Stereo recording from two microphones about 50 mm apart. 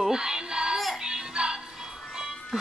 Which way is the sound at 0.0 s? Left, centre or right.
Centre.